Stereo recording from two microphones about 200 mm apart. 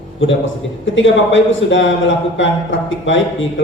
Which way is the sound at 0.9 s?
70° left (ahead or behind).